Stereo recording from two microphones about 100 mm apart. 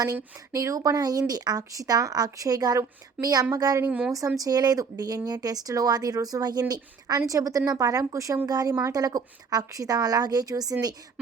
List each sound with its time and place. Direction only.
0.3 s speech: 35° right (ahead or behind)
3.8 s speech: 15° right (ahead or behind)
4.4 s speech: 40° right (ahead or behind)